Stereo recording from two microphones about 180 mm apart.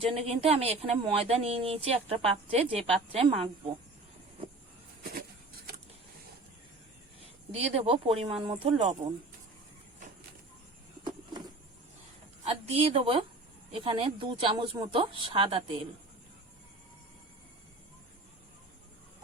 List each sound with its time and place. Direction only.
0.0 s a woman's voice: 35° right (ahead or behind)
7.5 s a woman's voice: 35° right (ahead or behind)
11.0 s a sound: 25° right (ahead or behind)
12.5 s a woman's voice: 35° right (ahead or behind)